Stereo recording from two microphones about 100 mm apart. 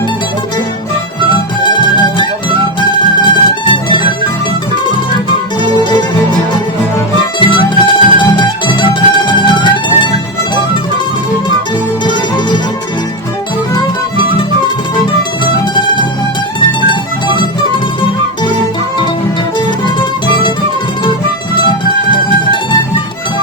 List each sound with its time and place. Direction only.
1.6 s music: 55° left (ahead or behind)
7.3 s music: 55° left (ahead or behind)
15.7 s music: 50° left (ahead or behind)